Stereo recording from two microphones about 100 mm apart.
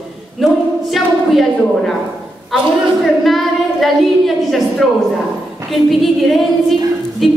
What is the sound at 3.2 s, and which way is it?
A woman's voice, centre (ahead or behind).